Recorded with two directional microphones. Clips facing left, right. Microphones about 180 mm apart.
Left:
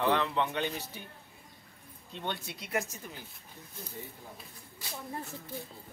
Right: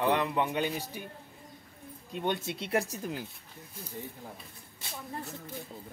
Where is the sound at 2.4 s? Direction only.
25° right (ahead or behind).